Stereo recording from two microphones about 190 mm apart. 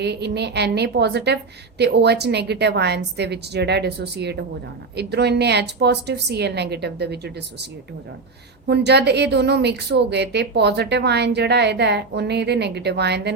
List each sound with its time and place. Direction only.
0.0 s a woman's voice: 60° right (ahead or behind)
8.6 s a woman's voice: 60° right (ahead or behind)